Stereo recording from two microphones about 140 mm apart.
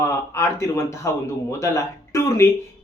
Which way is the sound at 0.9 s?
20° left (ahead or behind).